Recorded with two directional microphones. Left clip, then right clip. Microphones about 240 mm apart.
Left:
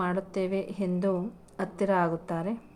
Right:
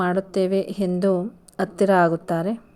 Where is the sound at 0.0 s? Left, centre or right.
Right.